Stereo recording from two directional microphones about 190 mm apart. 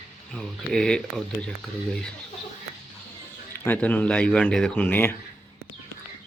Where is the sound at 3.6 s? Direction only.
10° left (ahead or behind).